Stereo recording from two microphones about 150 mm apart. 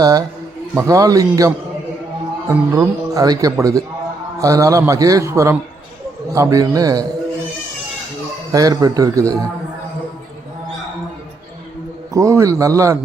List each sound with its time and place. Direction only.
0.0 s a man's voice: 25° right (ahead or behind)
8.5 s a man's voice: 25° right (ahead or behind)
12.1 s a man's voice: 20° right (ahead or behind)